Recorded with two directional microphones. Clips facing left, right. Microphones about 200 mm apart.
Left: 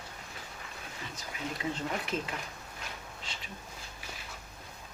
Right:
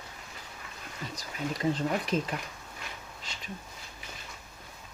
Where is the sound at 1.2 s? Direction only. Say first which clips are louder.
Right 5 dB; 35° right (ahead or behind).